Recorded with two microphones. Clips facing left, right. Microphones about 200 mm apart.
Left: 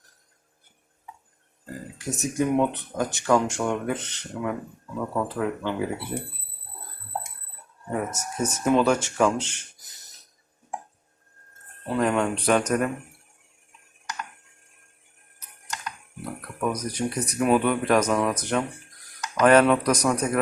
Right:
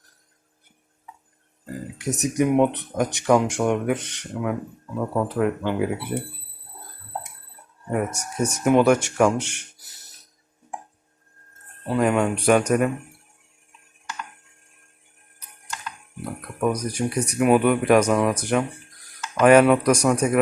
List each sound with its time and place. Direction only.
2.0 s speech: 20° right (ahead or behind)
7.9 s speech: 10° right (ahead or behind)
11.9 s speech: 5° right (ahead or behind)
16.6 s speech: 10° right (ahead or behind)